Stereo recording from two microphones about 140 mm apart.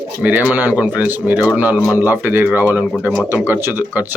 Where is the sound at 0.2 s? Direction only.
10° right (ahead or behind).